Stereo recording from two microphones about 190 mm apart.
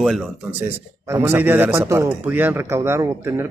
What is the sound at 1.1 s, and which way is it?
A man's voice, 10° right (ahead or behind).